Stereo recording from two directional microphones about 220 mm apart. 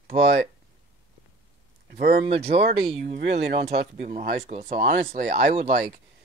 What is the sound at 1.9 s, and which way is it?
Speech, 30° right (ahead or behind).